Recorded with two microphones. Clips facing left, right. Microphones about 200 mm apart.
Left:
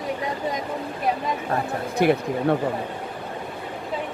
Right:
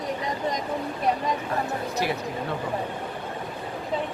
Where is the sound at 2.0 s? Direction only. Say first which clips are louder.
Left 11 dB; 55° left (ahead or behind).